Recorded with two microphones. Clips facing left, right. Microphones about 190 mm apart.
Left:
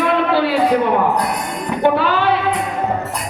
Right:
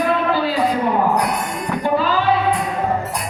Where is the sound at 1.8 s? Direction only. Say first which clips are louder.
Left 4 dB; 70° left (ahead or behind).